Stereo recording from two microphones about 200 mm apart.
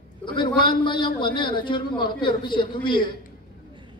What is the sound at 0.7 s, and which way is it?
A man's voice, 25° left (ahead or behind).